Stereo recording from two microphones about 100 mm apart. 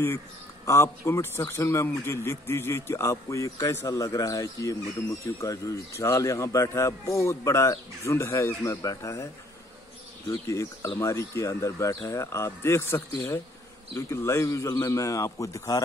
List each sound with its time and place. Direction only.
0.7 s a man's voice: 30° left (ahead or behind)